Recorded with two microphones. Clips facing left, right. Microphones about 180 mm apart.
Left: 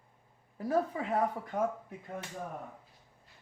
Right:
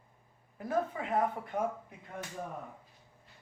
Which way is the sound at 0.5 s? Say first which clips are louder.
Left 2 dB; 35° left (ahead or behind).